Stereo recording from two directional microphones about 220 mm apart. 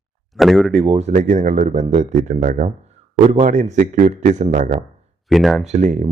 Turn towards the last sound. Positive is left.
turn(degrees=-30)  # may be behind; listen again after turning